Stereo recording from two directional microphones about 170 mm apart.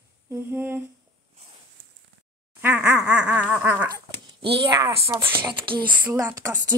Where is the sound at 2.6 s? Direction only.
5° right (ahead or behind).